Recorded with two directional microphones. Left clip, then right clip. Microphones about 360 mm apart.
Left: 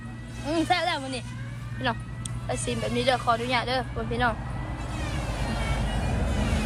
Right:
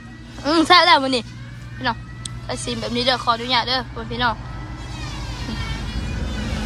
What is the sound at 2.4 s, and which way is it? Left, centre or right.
Speech, centre.